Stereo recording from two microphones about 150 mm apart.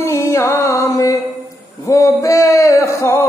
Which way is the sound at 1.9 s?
20° left (ahead or behind).